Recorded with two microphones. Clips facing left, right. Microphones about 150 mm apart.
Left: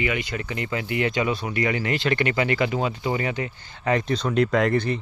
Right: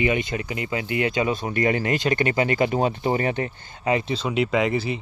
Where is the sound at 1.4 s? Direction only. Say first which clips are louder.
Right 2 dB; 35° right (ahead or behind).